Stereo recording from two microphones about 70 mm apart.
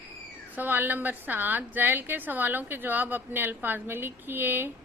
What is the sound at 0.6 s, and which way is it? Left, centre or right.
A woman's voice, right.